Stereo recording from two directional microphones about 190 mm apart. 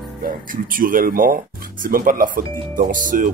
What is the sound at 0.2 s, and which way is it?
Speech, 45° right (ahead or behind).